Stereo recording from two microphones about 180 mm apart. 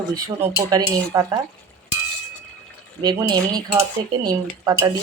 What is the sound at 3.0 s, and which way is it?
Speech, 25° right (ahead or behind).